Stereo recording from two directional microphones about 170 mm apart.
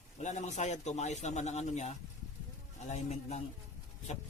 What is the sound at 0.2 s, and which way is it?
A man's voice, 45° left (ahead or behind).